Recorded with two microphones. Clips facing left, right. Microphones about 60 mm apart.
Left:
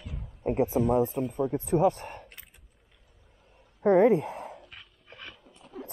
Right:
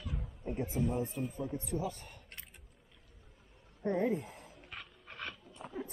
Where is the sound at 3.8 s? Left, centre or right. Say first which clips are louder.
Left 12 dB; left.